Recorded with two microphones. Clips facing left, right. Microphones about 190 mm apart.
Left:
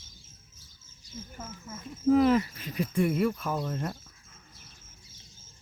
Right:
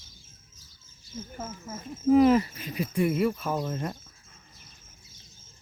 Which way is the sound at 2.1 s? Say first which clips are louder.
Right 4 dB; 20° right (ahead or behind).